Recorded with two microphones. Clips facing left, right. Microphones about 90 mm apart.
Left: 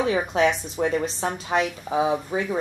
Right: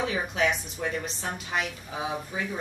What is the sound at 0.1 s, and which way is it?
Speech, 35° left (ahead or behind).